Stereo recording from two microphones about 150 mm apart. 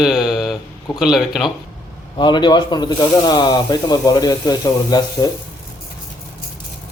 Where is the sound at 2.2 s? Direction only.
30° left (ahead or behind).